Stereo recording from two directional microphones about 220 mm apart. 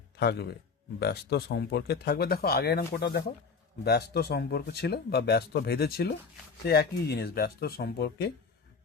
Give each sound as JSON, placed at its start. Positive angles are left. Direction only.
{"t": 0.2, "sound": "speech", "side_deg": 50}